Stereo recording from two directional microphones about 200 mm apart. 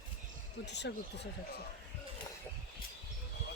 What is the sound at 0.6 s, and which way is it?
Speech, 60° left (ahead or behind).